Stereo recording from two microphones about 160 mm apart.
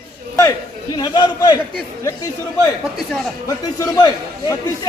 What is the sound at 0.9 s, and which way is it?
Speech, 30° left (ahead or behind).